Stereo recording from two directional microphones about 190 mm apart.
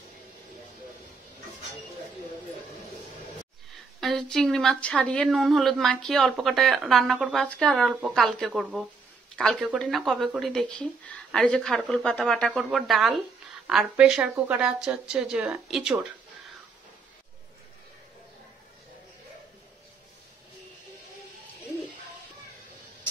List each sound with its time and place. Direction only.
4.0 s a woman's voice: centre (ahead or behind)